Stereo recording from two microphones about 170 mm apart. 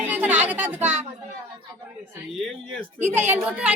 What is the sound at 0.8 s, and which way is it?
Speech, 45° right (ahead or behind).